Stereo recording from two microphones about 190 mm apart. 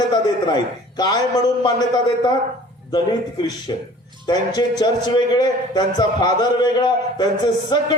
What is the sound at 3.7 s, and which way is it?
A man's voice, 20° left (ahead or behind).